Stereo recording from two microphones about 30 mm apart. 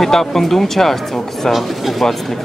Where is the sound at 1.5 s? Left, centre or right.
Centre.